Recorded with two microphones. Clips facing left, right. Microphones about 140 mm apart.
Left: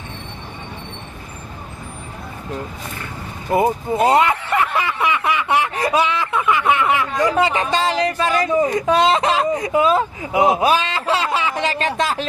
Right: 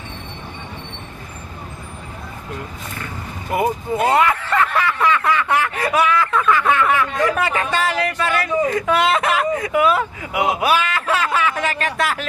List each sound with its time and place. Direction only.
3.5 s speech: 30° left (ahead or behind)